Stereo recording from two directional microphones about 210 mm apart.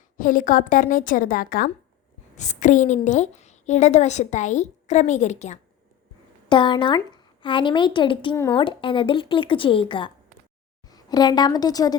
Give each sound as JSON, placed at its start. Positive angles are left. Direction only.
{"t": 0.2, "sound": "a woman's voice", "side_deg": 40}
{"t": 6.5, "sound": "a woman's voice", "side_deg": 20}